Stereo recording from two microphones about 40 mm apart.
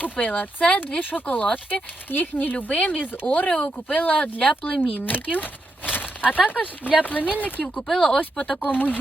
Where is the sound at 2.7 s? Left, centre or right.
Left.